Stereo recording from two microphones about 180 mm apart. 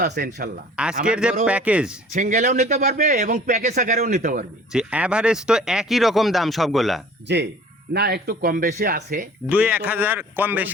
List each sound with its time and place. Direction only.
0.0 s speech: 60° right (ahead or behind)
1.0 s a man's voice: 5° right (ahead or behind)
2.1 s speech: 40° right (ahead or behind)
4.7 s speech: 5° right (ahead or behind)
7.3 s speech: 70° right (ahead or behind); by 9.3 s 45° right (ahead or behind)
9.5 s a man's voice: 10° right (ahead or behind)